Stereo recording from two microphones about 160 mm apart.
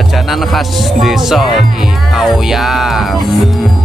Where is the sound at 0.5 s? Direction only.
Centre (ahead or behind).